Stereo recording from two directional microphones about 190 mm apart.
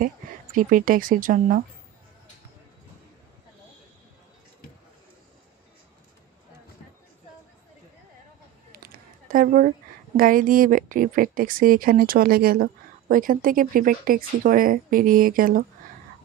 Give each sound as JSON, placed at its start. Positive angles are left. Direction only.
{"t": 0.0, "sound": "speech", "side_deg": -45}
{"t": 8.7, "sound": "a sound", "side_deg": -50}
{"t": 10.1, "sound": "a woman's voice", "side_deg": -45}